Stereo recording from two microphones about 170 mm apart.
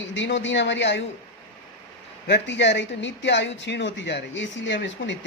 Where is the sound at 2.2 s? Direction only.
90° left.